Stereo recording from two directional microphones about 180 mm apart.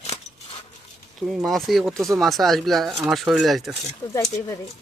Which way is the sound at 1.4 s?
Centre (ahead or behind).